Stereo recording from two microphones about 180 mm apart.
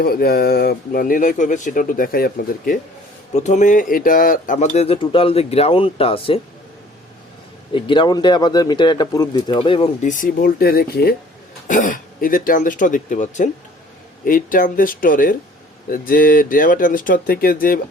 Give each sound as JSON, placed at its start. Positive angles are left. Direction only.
{"t": 0.0, "sound": "speech", "side_deg": 60}
{"t": 3.3, "sound": "speech", "side_deg": 40}
{"t": 7.7, "sound": "a man's voice", "side_deg": 30}